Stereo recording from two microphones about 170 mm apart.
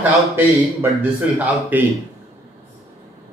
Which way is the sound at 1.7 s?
10° right (ahead or behind).